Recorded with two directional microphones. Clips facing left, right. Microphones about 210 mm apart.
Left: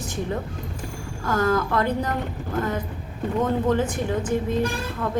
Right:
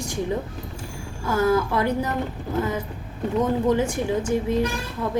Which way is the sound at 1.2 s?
10° right (ahead or behind).